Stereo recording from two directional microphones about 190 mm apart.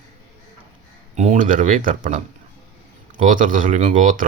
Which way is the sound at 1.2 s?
40° right (ahead or behind).